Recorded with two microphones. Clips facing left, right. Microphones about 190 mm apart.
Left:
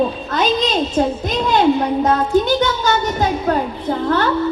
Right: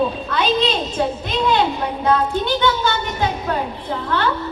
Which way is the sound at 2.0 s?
40° left (ahead or behind).